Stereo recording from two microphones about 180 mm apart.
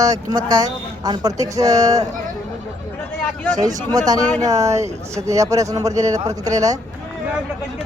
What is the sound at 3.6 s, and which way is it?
Speech, 20° right (ahead or behind).